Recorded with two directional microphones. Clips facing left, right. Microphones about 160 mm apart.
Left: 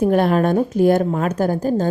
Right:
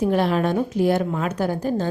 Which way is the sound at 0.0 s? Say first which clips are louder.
Left 4 dB; 50° left (ahead or behind).